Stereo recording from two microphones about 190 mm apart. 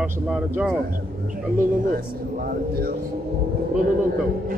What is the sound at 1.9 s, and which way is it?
Speech, 50° right (ahead or behind).